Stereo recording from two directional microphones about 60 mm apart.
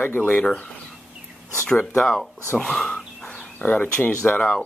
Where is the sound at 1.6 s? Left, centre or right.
Centre.